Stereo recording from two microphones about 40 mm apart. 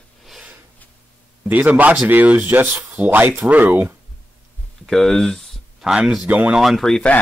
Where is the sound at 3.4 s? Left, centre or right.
Right.